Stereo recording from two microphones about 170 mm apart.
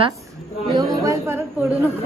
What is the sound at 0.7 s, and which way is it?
Speech, 15° right (ahead or behind).